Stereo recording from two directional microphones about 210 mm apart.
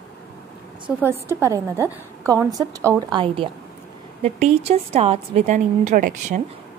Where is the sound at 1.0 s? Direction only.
10° right (ahead or behind).